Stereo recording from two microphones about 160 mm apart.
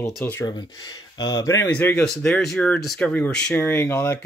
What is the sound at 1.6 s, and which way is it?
Speech, 10° left (ahead or behind).